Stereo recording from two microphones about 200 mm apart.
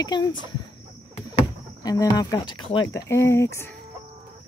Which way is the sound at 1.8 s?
20° left (ahead or behind).